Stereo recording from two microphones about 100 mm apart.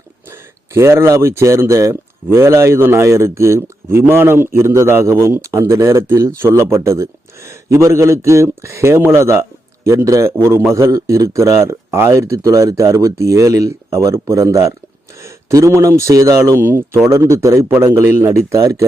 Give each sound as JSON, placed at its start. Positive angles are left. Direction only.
{"t": 0.3, "sound": "speech", "side_deg": -25}